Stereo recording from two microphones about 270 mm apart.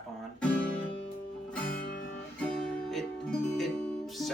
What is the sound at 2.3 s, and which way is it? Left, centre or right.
Music, centre.